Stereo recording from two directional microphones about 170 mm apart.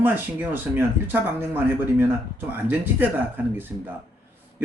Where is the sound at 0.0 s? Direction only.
10° right (ahead or behind).